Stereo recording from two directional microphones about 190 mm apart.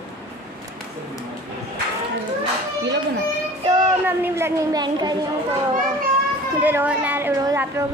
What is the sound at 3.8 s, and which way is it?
A child's voice, 10° right (ahead or behind).